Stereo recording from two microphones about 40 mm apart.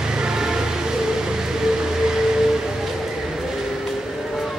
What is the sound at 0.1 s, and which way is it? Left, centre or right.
Vehicle, centre.